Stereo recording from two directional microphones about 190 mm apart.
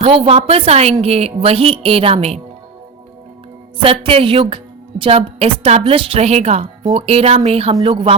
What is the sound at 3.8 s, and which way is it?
A woman's voice, 30° right (ahead or behind).